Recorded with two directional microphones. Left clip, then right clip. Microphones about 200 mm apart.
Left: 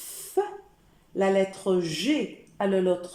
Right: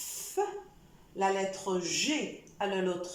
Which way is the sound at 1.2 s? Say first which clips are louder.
Left 6 dB; 45° left (ahead or behind).